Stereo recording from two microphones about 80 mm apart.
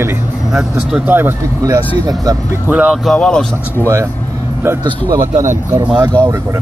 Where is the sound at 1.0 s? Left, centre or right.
Right.